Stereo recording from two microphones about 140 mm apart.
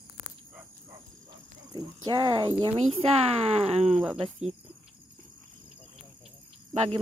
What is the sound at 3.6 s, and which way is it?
Speech, 50° right (ahead or behind).